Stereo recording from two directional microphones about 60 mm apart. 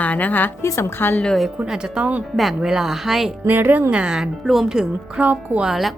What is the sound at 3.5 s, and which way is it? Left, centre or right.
Speech, right.